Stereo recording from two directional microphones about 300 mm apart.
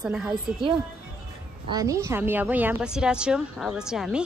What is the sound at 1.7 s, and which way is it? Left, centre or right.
A woman's voice, centre.